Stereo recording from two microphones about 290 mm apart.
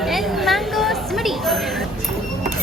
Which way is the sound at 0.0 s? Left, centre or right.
Centre.